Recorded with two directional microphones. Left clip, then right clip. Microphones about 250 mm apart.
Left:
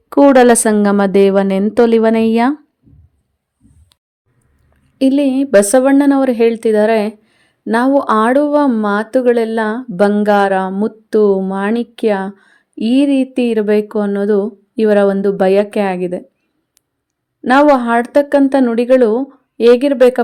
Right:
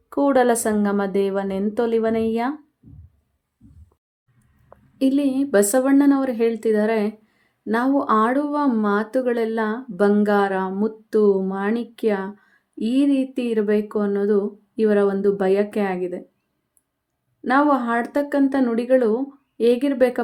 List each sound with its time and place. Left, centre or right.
0.1 s speech: left
4.9 s speech: left
17.4 s speech: left